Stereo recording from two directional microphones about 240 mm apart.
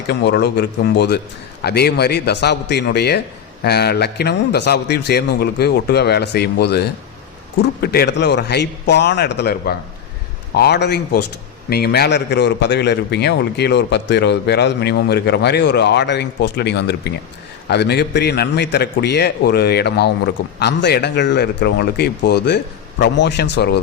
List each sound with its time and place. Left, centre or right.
0.1 s a man's voice: left